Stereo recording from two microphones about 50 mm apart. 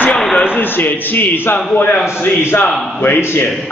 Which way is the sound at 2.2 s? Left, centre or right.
Left.